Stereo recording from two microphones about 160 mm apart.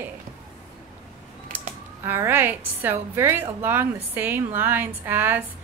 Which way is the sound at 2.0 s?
15° right (ahead or behind).